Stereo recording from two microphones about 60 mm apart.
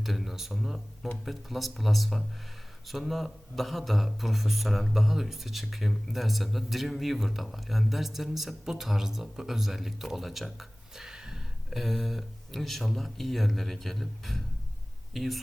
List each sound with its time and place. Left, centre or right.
0.0 s speech: centre